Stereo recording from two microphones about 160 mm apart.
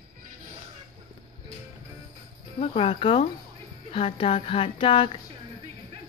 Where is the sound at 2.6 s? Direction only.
35° left (ahead or behind).